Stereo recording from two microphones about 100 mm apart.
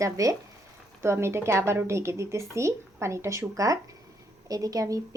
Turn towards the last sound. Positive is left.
turn(degrees=-35)  # may be behind; listen again after turning